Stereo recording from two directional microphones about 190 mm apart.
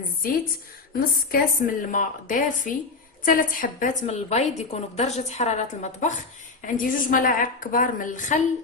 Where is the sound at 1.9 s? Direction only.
45° left (ahead or behind).